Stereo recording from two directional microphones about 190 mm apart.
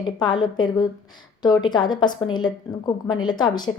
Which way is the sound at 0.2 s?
25° left (ahead or behind).